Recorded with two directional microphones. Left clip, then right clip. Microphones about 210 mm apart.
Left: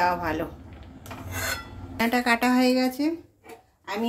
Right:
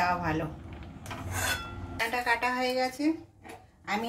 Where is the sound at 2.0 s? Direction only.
55° left (ahead or behind).